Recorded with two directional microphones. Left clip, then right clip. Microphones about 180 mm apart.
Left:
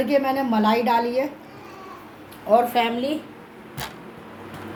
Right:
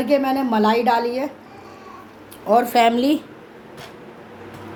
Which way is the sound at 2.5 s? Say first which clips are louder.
Right 3 dB; 75° right (ahead or behind).